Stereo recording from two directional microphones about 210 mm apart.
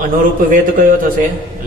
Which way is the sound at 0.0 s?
40° right (ahead or behind).